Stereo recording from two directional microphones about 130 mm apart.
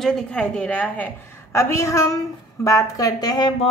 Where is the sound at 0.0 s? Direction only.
5° left (ahead or behind); by 3.5 s 30° left (ahead or behind).